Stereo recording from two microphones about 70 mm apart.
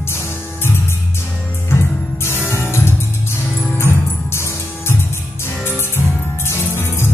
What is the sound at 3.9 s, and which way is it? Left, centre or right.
Music, left.